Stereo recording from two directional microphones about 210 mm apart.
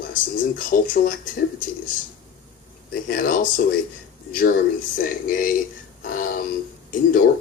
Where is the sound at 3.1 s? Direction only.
40° left (ahead or behind).